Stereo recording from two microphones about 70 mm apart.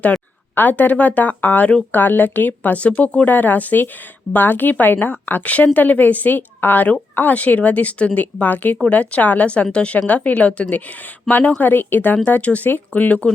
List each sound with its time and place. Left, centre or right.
0.5 s a woman's voice: left